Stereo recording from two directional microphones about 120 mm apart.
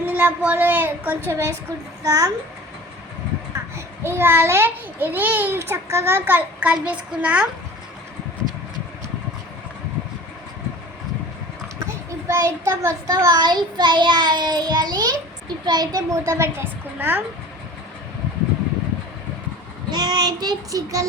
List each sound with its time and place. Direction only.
0.0 s a child's voice: 15° right (ahead or behind)
3.8 s a child's voice: 20° right (ahead or behind)
12.3 s a child's voice: 20° right (ahead or behind)
19.9 s a child's voice: 35° right (ahead or behind)